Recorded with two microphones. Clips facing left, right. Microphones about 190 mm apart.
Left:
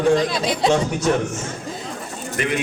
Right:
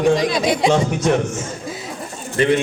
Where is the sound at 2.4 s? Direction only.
30° right (ahead or behind).